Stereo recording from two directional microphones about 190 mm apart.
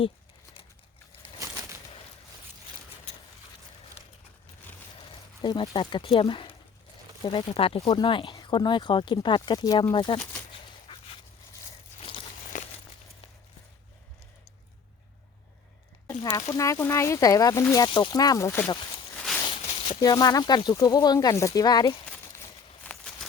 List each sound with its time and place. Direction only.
4.9 s speech: 25° left (ahead or behind)
9.9 s a sound: 25° left (ahead or behind)
12.5 s crumpling: 45° left (ahead or behind)
16.2 s speech: 20° left (ahead or behind)
19.5 s speech: 25° left (ahead or behind)
22.0 s a sound: 5° left (ahead or behind)